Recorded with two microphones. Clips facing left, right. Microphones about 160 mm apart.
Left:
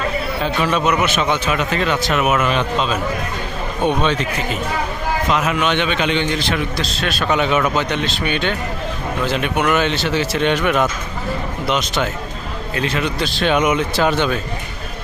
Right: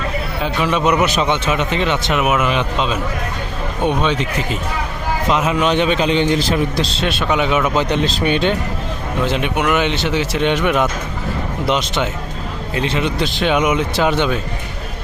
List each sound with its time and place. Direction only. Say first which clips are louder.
0.4 s speech: right 1 dB; 15° right (ahead or behind)
1.0 s a man's voice: right 2 dB; 35° right (ahead or behind)
1.3 s speech: right 1 dB; 25° right (ahead or behind)
5.3 s a man's voice: right 3 dB; 25° right (ahead or behind)
7.3 s speech: left 1 dB; 15° right (ahead or behind)
7.8 s a man's voice: right 3 dB; 30° right (ahead or behind); by 14.3 s 15° right (ahead or behind)